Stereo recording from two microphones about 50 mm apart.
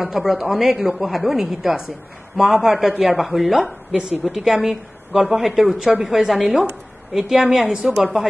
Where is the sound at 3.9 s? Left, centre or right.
Centre.